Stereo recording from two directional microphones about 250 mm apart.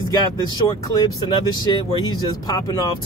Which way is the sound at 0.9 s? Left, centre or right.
Centre.